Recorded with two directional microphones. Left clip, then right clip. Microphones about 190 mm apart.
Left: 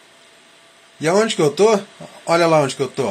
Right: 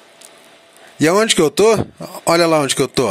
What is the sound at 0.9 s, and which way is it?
Speech, 60° right (ahead or behind).